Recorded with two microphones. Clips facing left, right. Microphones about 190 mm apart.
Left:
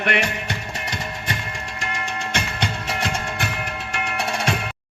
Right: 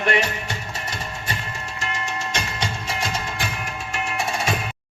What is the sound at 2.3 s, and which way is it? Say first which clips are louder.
Music: left 2 dB; 60° left (ahead or behind).